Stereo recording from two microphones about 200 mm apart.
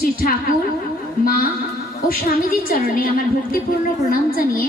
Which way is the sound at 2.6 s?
45° left (ahead or behind).